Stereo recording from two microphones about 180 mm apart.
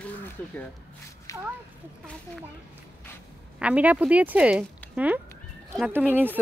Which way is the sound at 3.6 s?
5° right (ahead or behind).